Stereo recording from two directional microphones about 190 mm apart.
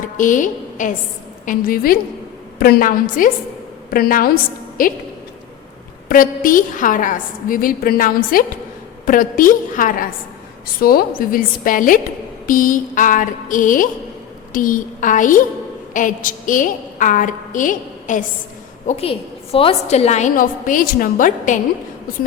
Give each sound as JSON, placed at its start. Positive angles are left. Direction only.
{"t": 0.0, "sound": "a woman's voice", "side_deg": 45}
{"t": 6.1, "sound": "a woman's voice", "side_deg": 45}
{"t": 18.9, "sound": "a woman's voice", "side_deg": 30}